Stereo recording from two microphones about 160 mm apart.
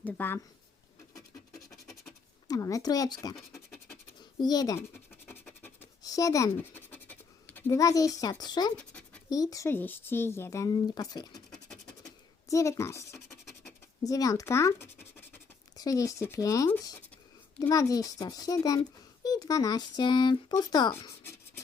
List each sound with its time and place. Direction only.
0.0 s speech: 15° left (ahead or behind)
1.1 s scratch: 20° left (ahead or behind)
2.5 s speech: 20° left (ahead or behind)
4.2 s scratch: 25° left (ahead or behind)
6.0 s speech: 20° left (ahead or behind)
8.7 s scratch: 5° left (ahead or behind)
9.3 s speech: 20° left (ahead or behind)
12.0 s a sound: 20° left (ahead or behind)
14.0 s speech: 20° left (ahead or behind)